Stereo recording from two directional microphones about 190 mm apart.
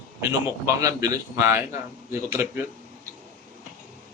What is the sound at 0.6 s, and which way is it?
A man's voice, 15° right (ahead or behind).